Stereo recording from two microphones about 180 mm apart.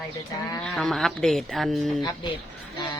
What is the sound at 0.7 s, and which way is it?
Speech, centre (ahead or behind).